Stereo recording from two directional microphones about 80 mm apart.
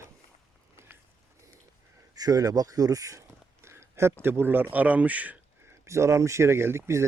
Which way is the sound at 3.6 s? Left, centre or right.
Right.